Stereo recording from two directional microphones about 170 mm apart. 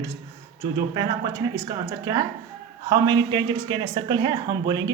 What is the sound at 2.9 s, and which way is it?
A woman's voice, 25° right (ahead or behind).